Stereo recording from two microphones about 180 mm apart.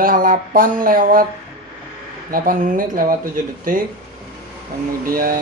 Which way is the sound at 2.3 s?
50° right (ahead or behind).